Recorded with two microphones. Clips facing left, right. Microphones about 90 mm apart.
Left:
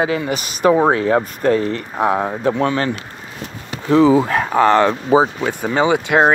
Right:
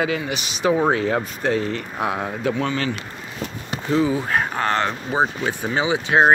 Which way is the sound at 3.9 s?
90° left.